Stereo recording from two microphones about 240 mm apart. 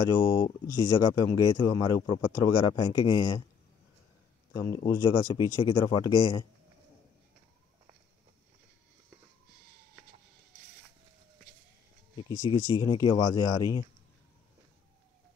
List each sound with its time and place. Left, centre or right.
0.2 s speech: centre
4.6 s speech: centre
12.3 s speech: centre